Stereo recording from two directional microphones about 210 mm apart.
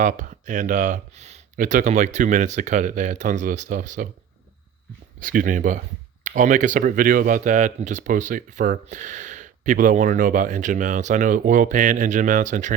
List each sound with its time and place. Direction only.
0.0 s speech: 35° right (ahead or behind)
5.2 s speech: 40° right (ahead or behind)